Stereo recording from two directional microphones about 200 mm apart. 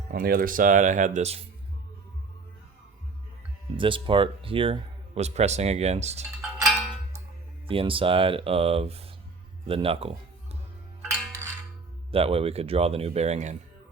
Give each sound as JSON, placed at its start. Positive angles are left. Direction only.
{"t": 0.1, "sound": "speech", "side_deg": -45}
{"t": 3.8, "sound": "speech", "side_deg": -25}
{"t": 6.7, "sound": "music", "side_deg": 0}
{"t": 7.7, "sound": "speech", "side_deg": -25}
{"t": 12.1, "sound": "speech", "side_deg": -30}